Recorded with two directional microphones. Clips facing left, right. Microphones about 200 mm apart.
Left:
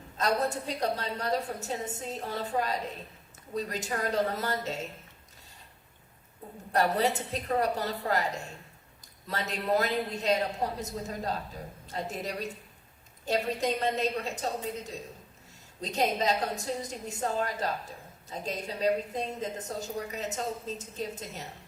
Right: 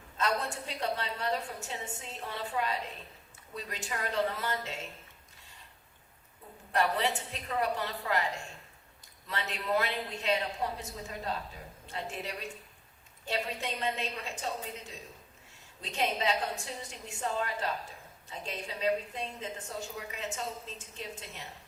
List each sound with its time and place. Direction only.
0.2 s a woman's voice: 40° left (ahead or behind)
6.7 s a woman's voice: 40° left (ahead or behind)